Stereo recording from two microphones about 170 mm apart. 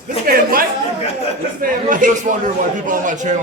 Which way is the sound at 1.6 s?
50° right (ahead or behind).